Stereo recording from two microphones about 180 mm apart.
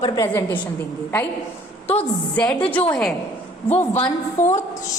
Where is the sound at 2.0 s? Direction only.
10° left (ahead or behind).